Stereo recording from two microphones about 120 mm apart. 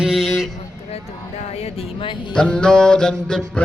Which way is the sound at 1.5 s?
60° left (ahead or behind).